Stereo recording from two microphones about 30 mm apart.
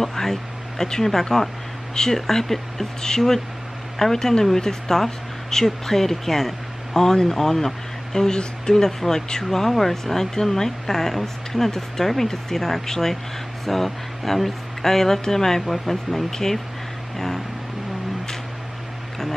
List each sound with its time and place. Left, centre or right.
0.0 s speech: centre
16.3 s speech: centre